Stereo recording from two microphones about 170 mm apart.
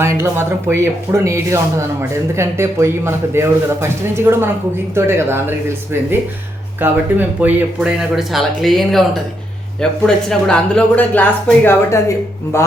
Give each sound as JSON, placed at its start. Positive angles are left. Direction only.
{"t": 0.0, "sound": "speech", "side_deg": -15}
{"t": 10.1, "sound": "speech", "side_deg": 5}